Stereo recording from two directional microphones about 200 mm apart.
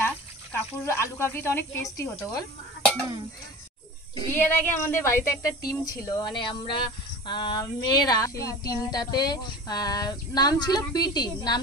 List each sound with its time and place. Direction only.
0.0 s speech: 10° left (ahead or behind)
4.3 s speech: 10° left (ahead or behind)